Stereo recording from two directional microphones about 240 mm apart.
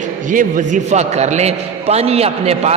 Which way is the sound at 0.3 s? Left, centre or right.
Right.